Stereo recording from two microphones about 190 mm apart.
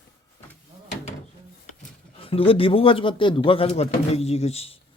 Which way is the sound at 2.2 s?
30° left (ahead or behind).